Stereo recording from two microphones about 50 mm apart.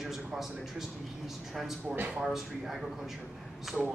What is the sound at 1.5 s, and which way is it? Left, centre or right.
Speech, centre.